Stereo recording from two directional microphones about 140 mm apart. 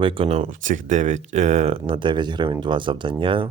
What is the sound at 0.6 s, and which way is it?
Speech, 65° right (ahead or behind).